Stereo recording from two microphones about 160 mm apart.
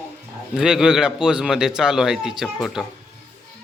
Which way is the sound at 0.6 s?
5° right (ahead or behind).